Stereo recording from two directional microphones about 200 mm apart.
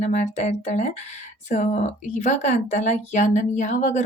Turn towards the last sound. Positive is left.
turn(degrees=35)  # may be behind; listen again after turning